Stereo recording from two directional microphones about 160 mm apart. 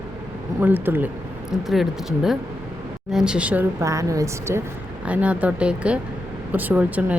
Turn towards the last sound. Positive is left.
turn(degrees=-10)  # may be behind; listen again after turning